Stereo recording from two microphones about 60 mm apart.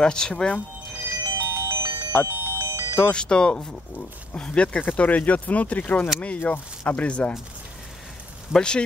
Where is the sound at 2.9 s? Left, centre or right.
Centre.